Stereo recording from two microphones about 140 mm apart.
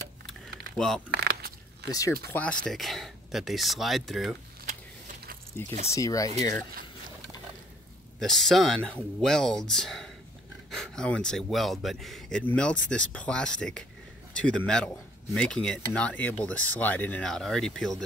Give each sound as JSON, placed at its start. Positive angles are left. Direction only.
{"t": 0.3, "sound": "a sound", "side_deg": 5}
{"t": 1.9, "sound": "speech", "side_deg": 25}
{"t": 2.3, "sound": "speech", "side_deg": 5}
{"t": 4.6, "sound": "a sound", "side_deg": -80}
{"t": 5.6, "sound": "speech", "side_deg": 20}
{"t": 8.2, "sound": "speech", "side_deg": 0}